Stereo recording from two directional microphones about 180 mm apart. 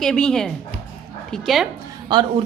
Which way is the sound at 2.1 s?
25° right (ahead or behind).